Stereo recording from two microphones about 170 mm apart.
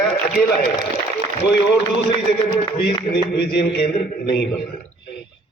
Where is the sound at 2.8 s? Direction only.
75° left (ahead or behind).